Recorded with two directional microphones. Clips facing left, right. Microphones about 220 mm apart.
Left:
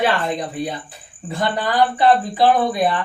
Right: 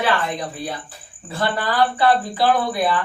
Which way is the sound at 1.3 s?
20° left (ahead or behind).